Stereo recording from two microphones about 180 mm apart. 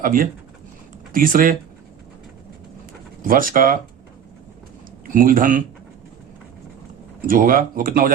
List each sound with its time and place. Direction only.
0.0 s speech: 50° right (ahead or behind)
3.2 s speech: 50° right (ahead or behind)
5.0 s speech: 50° right (ahead or behind)
7.3 s speech: 50° right (ahead or behind)